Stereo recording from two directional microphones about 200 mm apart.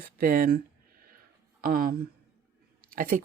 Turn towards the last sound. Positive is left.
turn(degrees=-45)  # may be behind; listen again after turning